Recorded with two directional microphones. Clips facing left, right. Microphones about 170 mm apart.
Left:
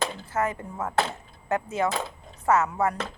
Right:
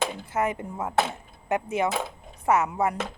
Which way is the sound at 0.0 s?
15° right (ahead or behind).